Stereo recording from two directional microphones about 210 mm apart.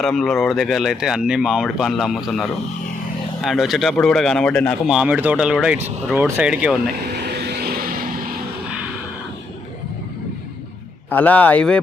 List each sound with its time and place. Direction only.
0.0 s speech: centre (ahead or behind)
7.3 s vehicle: 50° right (ahead or behind)
11.1 s speech: 10° left (ahead or behind)